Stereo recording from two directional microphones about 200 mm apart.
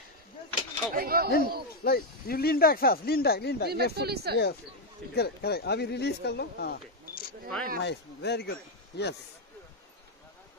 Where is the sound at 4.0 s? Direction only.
55° right (ahead or behind).